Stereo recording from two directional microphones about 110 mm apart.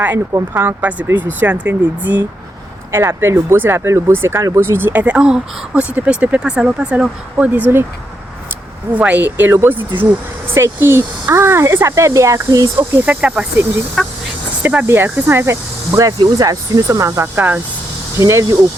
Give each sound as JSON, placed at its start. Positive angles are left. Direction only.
{"t": 0.3, "sound": "speech", "side_deg": -20}
{"t": 9.0, "sound": "speech", "side_deg": -15}
{"t": 12.9, "sound": "speech", "side_deg": -15}
{"t": 14.0, "sound": "speech", "side_deg": 0}
{"t": 14.6, "sound": "speech", "side_deg": -10}